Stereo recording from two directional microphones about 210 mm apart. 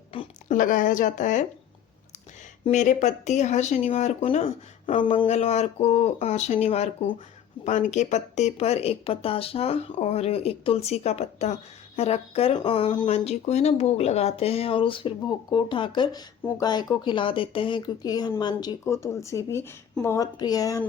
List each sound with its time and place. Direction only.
0.1 s a sound: 25° left (ahead or behind)
0.5 s speech: 40° left (ahead or behind)
2.6 s speech: 35° left (ahead or behind); by 20.8 s 15° left (ahead or behind)